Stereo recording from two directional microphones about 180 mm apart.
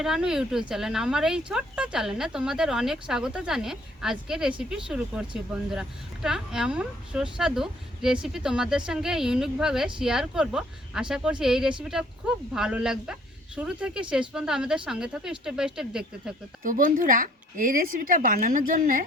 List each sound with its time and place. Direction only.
0.0 s speech: 5° right (ahead or behind)
16.6 s speech: 50° right (ahead or behind)